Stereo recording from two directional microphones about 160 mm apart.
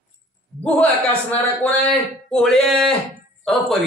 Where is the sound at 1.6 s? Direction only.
10° left (ahead or behind).